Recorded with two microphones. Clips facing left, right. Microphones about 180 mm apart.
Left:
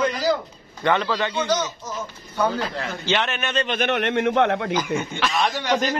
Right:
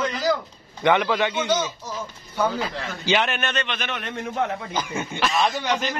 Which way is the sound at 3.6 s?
55° left (ahead or behind).